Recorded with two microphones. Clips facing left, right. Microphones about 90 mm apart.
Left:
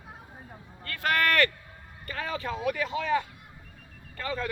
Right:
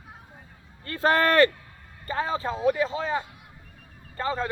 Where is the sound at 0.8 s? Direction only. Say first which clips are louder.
Right 5 dB; 30° right (ahead or behind).